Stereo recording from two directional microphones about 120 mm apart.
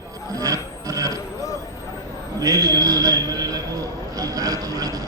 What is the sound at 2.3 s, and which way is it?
A man's voice, 30° right (ahead or behind).